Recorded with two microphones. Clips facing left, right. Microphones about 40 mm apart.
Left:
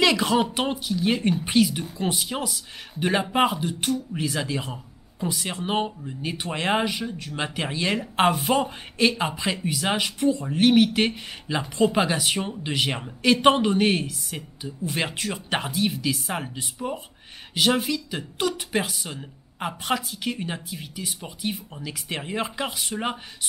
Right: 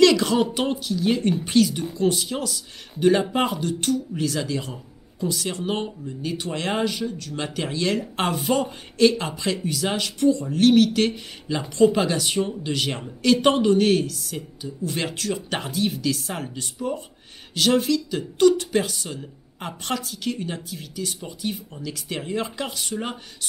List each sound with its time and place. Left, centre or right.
0.0 s a woman's voice: centre